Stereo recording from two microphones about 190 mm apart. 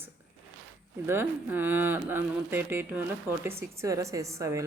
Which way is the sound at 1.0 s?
10° right (ahead or behind).